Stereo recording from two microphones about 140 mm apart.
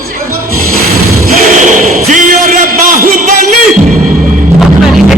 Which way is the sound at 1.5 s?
65° right (ahead or behind).